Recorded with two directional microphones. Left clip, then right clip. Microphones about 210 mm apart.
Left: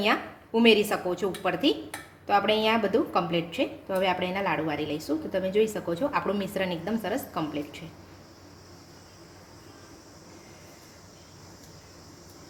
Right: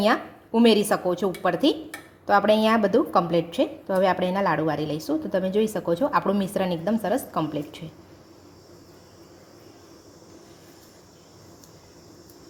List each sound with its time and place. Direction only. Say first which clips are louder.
0.0 s a woman's voice: right 4 dB; 30° right (ahead or behind)